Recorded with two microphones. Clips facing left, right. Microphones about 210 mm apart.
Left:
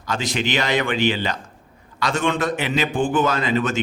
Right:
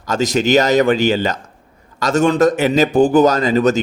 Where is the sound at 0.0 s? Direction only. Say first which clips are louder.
Right 8 dB; 45° right (ahead or behind).